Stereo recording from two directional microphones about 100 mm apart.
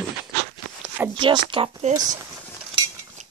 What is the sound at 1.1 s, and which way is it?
Speech, 50° right (ahead or behind).